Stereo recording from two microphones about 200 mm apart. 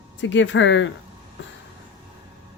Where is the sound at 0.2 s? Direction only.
65° left (ahead or behind).